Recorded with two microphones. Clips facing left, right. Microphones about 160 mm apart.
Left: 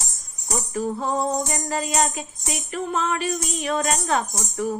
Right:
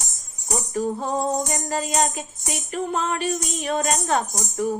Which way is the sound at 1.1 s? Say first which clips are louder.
Even; 45° right (ahead or behind).